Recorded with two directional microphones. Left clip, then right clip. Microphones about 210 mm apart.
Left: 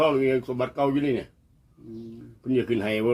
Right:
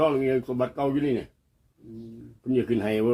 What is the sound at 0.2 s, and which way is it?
Speech, 30° left (ahead or behind).